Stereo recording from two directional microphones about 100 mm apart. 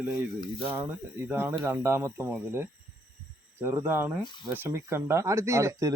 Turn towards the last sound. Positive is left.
turn(degrees=-30)  # may be behind; listen again after turning